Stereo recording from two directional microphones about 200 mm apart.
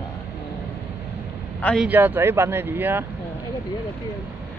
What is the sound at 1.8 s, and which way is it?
Speech, 10° right (ahead or behind).